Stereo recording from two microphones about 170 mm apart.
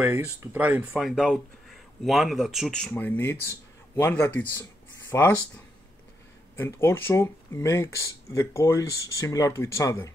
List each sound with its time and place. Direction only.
0.0 s speech: 15° right (ahead or behind); by 5.3 s 20° left (ahead or behind)
6.5 s speech: 15° left (ahead or behind)